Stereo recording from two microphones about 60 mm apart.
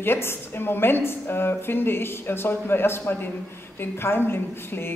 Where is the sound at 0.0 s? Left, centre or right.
Left.